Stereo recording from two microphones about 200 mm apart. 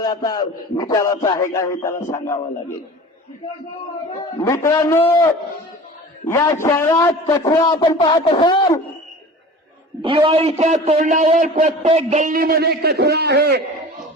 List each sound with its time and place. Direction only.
0.0 s a man's voice: 20° left (ahead or behind)
4.4 s a man's voice: 15° left (ahead or behind)
10.0 s a man's voice: 25° right (ahead or behind); by 13.7 s 55° right (ahead or behind)